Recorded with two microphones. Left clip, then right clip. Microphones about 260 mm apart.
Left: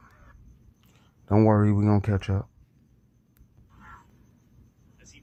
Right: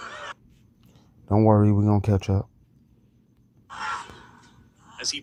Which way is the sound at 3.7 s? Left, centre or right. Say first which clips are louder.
Right 19 dB; right.